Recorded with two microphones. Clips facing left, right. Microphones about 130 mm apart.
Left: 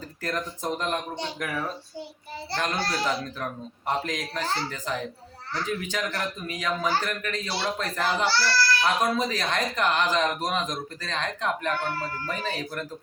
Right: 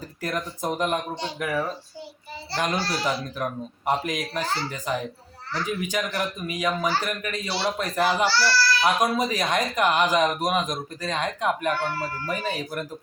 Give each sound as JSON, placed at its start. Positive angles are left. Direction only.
{"t": 0.2, "sound": "speech", "side_deg": -10}